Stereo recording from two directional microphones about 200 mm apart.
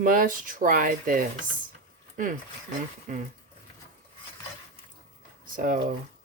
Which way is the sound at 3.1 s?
40° right (ahead or behind).